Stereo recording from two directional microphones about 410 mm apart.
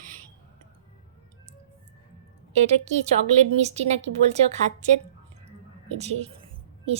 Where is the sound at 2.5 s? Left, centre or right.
Centre.